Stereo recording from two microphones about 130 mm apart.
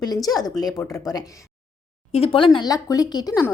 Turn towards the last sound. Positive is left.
turn(degrees=30)  # may be behind; listen again after turning